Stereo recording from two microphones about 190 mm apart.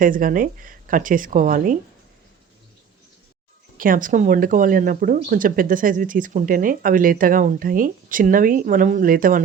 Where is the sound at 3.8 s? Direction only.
45° right (ahead or behind).